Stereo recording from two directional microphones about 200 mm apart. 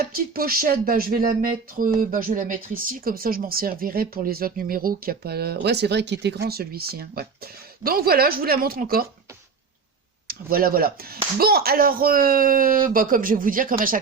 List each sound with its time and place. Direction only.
0.0 s speech: 50° right (ahead or behind)
10.2 s speech: 45° right (ahead or behind)